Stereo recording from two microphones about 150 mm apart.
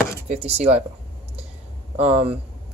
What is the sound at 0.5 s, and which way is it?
Speech, 45° right (ahead or behind).